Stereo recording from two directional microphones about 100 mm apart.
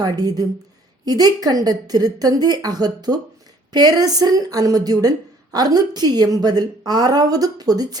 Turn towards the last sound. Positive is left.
turn(degrees=-40)  # may be behind; listen again after turning